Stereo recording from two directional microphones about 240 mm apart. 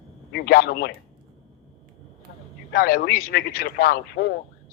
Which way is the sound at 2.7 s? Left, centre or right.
Left.